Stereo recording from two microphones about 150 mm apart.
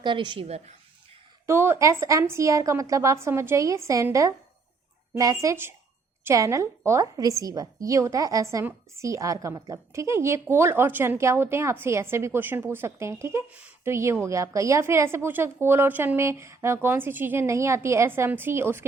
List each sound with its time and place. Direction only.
0.0 s a woman's voice: 30° right (ahead or behind)
1.5 s a woman's voice: 15° right (ahead or behind)